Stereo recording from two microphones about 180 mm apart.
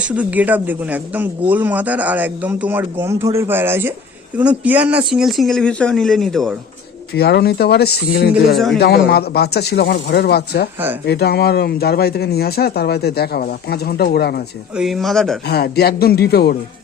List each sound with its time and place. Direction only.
0.0 s speech: 10° right (ahead or behind)
7.2 s speech: 65° left (ahead or behind)
8.5 s speech: centre (ahead or behind)
9.0 s speech: 60° left (ahead or behind)
14.8 s speech: centre (ahead or behind)
15.4 s speech: 65° left (ahead or behind)